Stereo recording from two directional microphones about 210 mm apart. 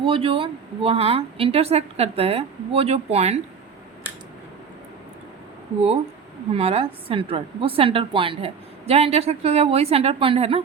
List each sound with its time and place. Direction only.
0.0 s a woman's voice: 25° right (ahead or behind)
6.5 s a woman's voice: 30° right (ahead or behind)